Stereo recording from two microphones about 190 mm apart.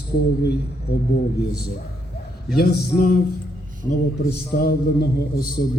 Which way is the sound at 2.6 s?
55° left (ahead or behind).